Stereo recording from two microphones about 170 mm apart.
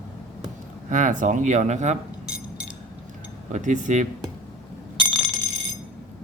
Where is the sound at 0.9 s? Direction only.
50° right (ahead or behind).